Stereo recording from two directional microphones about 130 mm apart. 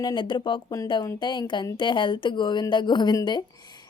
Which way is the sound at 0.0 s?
35° left (ahead or behind).